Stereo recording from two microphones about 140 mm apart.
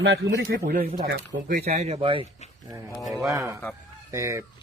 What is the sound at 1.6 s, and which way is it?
Speech, 50° right (ahead or behind).